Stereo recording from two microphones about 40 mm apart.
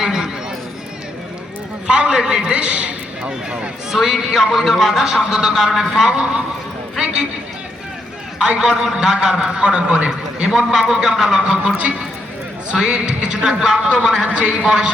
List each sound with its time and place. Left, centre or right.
0.0 s speech: centre
1.9 s a man's voice: right
2.1 s a man's voice: centre
2.6 s a man's voice: right
3.9 s a man's voice: centre
8.5 s a man's voice: centre
12.7 s a man's voice: centre